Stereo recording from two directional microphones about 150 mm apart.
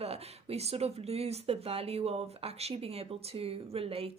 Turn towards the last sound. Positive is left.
turn(degrees=-40)  # may be behind; listen again after turning